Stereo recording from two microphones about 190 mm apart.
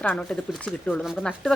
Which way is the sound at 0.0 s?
5° left (ahead or behind).